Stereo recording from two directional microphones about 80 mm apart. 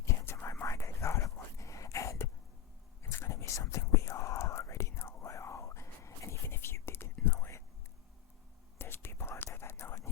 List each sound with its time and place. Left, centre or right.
0.0 s whispering: left
0.6 s a sound: left
3.0 s whispering: left
8.8 s whispering: left